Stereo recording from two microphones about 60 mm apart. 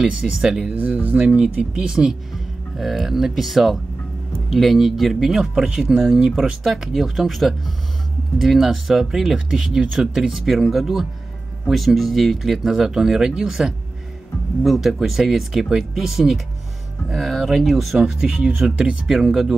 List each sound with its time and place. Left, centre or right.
0.0 s speech: centre
0.7 s speech: right
1.2 s speech: centre